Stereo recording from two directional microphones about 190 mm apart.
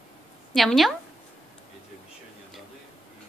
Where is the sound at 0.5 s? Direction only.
5° left (ahead or behind).